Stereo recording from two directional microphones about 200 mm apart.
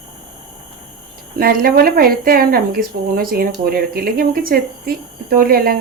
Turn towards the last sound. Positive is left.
turn(degrees=-50)  # may be behind; listen again after turning